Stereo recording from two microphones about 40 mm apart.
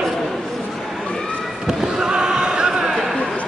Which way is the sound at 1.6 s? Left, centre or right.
Centre.